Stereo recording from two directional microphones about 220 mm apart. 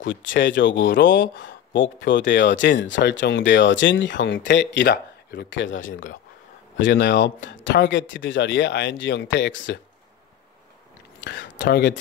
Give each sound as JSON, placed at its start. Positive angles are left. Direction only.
{"t": 0.0, "sound": "speech", "side_deg": 60}
{"t": 5.9, "sound": "speech", "side_deg": 35}
{"t": 6.8, "sound": "speech", "side_deg": 50}
{"t": 11.1, "sound": "speech", "side_deg": 55}